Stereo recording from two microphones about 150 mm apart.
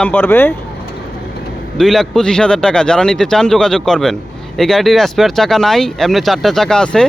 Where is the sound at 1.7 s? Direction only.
Centre (ahead or behind).